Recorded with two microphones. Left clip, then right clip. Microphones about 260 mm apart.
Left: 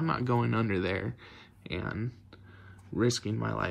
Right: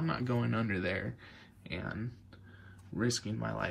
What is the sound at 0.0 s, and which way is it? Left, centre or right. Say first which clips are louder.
Speech: left 5 dB; centre.